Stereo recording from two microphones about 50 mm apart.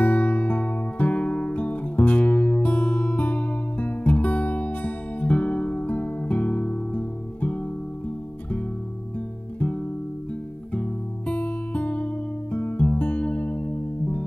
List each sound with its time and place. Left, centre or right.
0.0 s music: left
10.7 s music: left